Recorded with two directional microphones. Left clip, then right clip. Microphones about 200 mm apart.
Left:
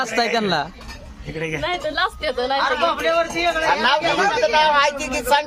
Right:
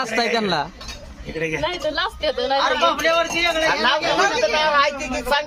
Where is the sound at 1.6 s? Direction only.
20° left (ahead or behind).